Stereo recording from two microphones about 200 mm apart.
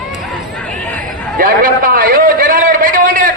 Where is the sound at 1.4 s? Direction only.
45° right (ahead or behind).